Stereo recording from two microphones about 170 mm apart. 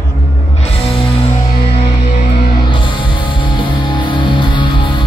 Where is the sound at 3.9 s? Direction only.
30° left (ahead or behind).